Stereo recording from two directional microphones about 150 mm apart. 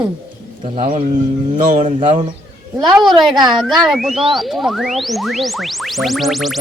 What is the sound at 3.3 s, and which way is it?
Speech, 30° right (ahead or behind).